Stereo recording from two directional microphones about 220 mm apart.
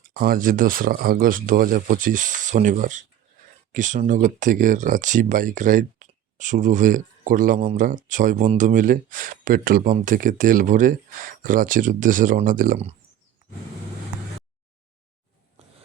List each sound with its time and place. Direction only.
0.1 s speech: 40° right (ahead or behind)